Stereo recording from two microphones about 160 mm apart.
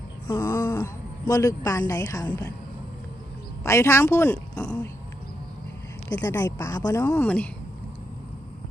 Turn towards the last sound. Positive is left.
turn(degrees=10)  # may be behind; listen again after turning